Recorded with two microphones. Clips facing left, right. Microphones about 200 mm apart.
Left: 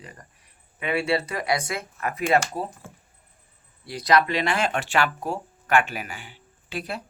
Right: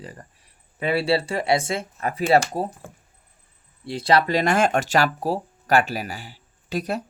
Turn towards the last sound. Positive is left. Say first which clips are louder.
# right 6 dB
turn(degrees=-40)  # may be behind; listen again after turning